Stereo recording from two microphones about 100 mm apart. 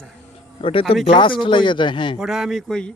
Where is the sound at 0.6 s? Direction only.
65° left (ahead or behind).